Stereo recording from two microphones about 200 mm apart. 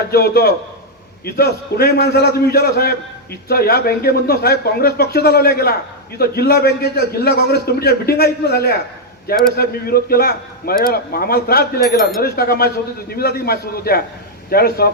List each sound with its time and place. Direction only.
0.1 s a man's voice: 50° left (ahead or behind)